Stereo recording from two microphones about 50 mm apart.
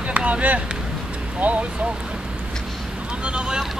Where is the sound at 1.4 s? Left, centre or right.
Right.